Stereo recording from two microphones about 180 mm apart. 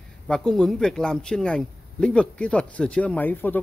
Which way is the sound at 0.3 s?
5° left (ahead or behind).